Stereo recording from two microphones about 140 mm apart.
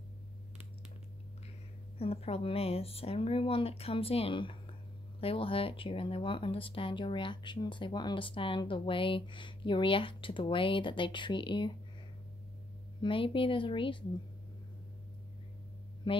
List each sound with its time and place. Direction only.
2.0 s speech: 45° left (ahead or behind)
13.0 s speech: 35° left (ahead or behind)
16.0 s speech: 35° left (ahead or behind)